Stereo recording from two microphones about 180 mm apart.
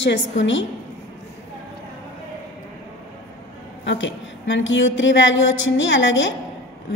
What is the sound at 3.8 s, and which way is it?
A woman's voice, 90° left.